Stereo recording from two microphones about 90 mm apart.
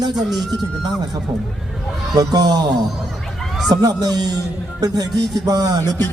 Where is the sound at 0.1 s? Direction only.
Centre (ahead or behind).